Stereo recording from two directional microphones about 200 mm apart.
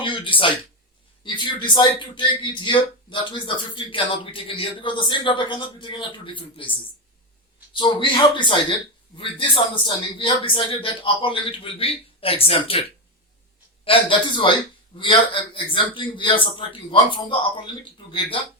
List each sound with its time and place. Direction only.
0.0 s a sound: 25° left (ahead or behind)
1.2 s a man's voice: 25° left (ahead or behind)
13.8 s a man's voice: 25° left (ahead or behind)